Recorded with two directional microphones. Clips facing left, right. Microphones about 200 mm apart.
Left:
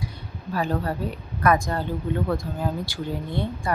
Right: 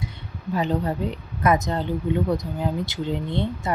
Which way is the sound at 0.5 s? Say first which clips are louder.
Right 2 dB; 20° right (ahead or behind).